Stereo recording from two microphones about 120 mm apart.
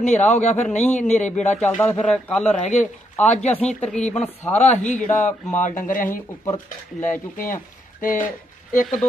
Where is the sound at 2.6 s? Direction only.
80° left.